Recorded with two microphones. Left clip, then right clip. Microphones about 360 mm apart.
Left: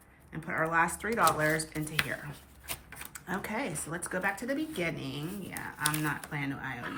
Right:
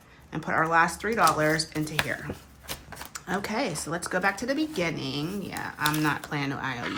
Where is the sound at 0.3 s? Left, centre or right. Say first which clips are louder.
Right 6 dB; centre.